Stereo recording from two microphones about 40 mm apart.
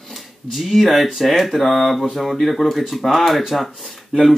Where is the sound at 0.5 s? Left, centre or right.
Centre.